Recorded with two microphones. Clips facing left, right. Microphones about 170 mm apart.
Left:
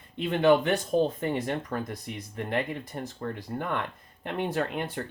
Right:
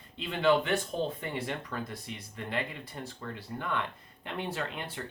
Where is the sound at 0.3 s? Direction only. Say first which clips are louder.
Left 5 dB; 45° left (ahead or behind).